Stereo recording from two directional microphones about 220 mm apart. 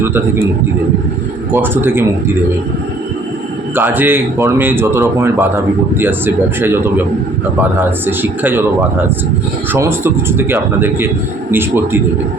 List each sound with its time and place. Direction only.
1.5 s speech: 10° right (ahead or behind)
3.8 s speech: 10° right (ahead or behind)
9.7 s speech: 10° right (ahead or behind)